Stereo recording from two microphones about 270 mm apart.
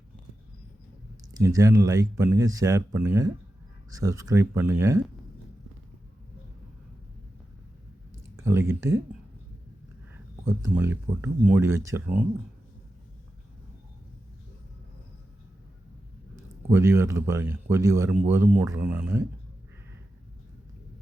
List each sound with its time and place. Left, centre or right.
1.3 s speech: centre
8.1 s a sound: centre
10.4 s speech: centre
16.3 s speech: centre